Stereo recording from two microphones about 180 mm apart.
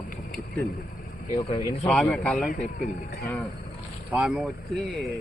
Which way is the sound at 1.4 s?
25° left (ahead or behind).